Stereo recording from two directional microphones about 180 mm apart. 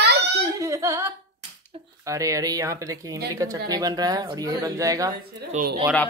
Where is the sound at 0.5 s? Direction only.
15° right (ahead or behind).